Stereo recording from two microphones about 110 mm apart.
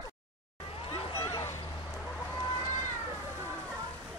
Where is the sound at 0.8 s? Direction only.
60° left (ahead or behind).